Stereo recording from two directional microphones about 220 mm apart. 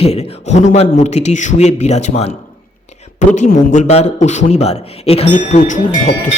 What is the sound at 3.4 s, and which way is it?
Speech, 35° left (ahead or behind).